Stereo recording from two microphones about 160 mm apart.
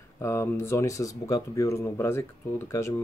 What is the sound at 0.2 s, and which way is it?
Speech, 15° left (ahead or behind).